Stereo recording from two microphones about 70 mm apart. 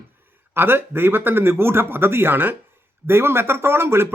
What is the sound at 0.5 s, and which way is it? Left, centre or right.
Speech, right.